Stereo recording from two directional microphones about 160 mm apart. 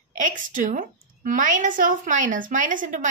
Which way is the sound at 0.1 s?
55° right (ahead or behind).